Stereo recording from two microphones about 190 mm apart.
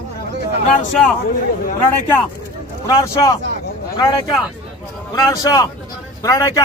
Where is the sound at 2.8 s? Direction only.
15° left (ahead or behind).